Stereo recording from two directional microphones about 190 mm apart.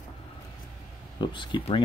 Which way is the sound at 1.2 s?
25° left (ahead or behind).